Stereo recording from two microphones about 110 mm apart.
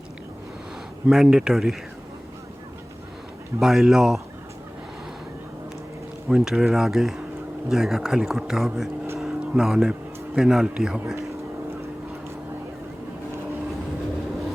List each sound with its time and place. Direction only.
1.0 s speech: 5° right (ahead or behind)
3.6 s speech: 5° right (ahead or behind)
6.2 s speech: 5° right (ahead or behind)
9.1 s music: centre (ahead or behind)
10.3 s speech: 5° right (ahead or behind)
11.1 s a sound: 30° right (ahead or behind)